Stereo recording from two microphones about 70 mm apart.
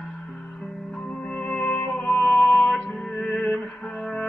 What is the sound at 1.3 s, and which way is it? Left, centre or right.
Music, centre.